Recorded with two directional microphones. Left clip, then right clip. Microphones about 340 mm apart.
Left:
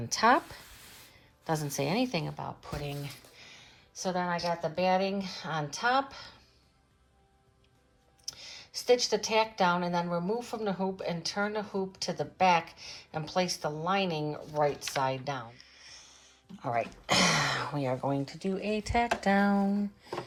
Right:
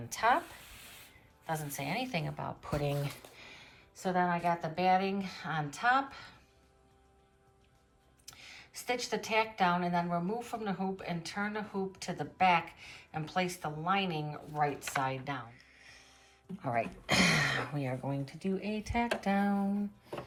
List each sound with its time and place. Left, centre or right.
0.1 s speech: centre
1.5 s speech: centre
8.3 s speech: centre